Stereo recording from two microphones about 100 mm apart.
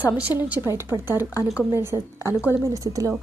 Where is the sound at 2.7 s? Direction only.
35° right (ahead or behind).